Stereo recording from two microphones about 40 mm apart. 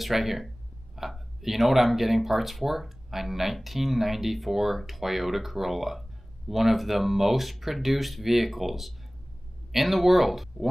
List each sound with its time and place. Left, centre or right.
0.0 s speech: centre